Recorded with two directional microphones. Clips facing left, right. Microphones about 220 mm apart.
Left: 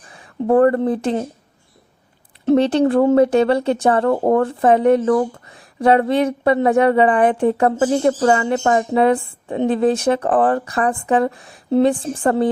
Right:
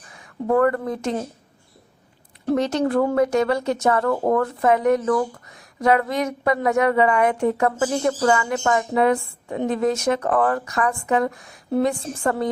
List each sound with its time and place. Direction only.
0.1 s speech: 30° left (ahead or behind)
2.4 s speech: 25° left (ahead or behind)